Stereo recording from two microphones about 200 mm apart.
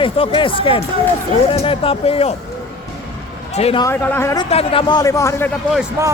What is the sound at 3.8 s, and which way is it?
Speech, 10° left (ahead or behind).